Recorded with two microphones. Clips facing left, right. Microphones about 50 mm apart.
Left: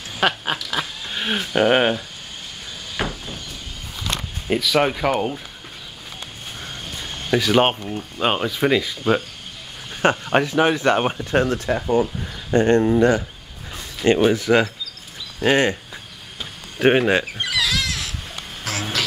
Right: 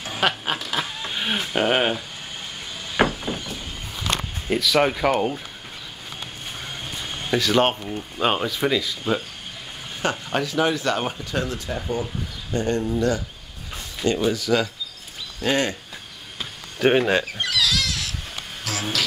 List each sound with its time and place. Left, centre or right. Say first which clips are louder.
0.2 s a sound: left 2 dB; centre
1.1 s speech: left 3 dB; centre
3.0 s a sound: right 6 dB; right
4.5 s speech: left 1 dB; centre
7.2 s speech: left 2 dB; centre
8.6 s speech: left 5 dB; left
14.3 s speech: left 5 dB; left
16.7 s speech: left 2 dB; centre
17.0 s goat: left 2 dB; centre
18.6 s a sound: left 1 dB; left